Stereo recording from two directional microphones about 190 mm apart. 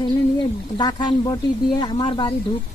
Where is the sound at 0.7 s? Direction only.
20° left (ahead or behind).